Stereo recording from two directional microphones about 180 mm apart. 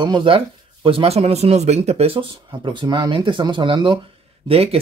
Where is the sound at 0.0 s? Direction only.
25° right (ahead or behind).